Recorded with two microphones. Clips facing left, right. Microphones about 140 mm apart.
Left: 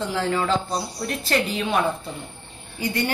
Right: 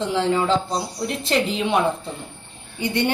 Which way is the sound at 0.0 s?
25° right (ahead or behind).